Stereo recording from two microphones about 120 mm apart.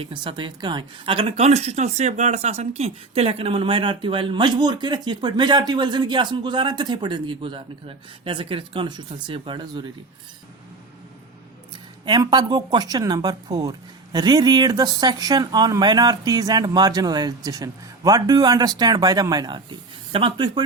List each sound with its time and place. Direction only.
0.0 s speech: 45° right (ahead or behind)
1.5 s speech: 65° right (ahead or behind); by 9.9 s 40° right (ahead or behind)
12.2 s speech: 35° right (ahead or behind)